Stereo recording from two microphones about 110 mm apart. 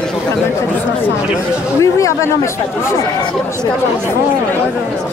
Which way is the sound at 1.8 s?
30° left (ahead or behind).